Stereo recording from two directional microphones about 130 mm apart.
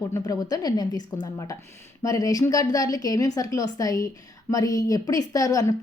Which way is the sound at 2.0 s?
25° left (ahead or behind).